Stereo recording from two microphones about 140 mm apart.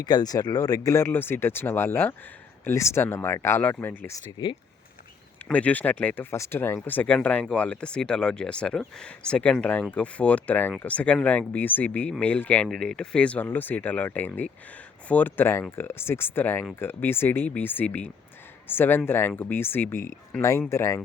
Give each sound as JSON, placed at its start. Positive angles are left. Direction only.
{"t": 0.0, "sound": "speech", "side_deg": 30}
{"t": 4.3, "sound": "speech", "side_deg": 35}
{"t": 5.5, "sound": "speech", "side_deg": 10}